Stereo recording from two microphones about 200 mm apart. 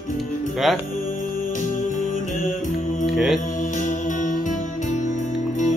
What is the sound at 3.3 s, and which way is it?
Music, 40° left (ahead or behind).